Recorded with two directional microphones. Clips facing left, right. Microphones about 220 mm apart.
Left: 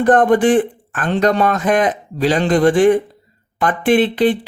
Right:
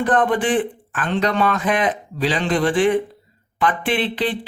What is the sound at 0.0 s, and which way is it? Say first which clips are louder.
A man's voice: left 6 dB; 45° left (ahead or behind).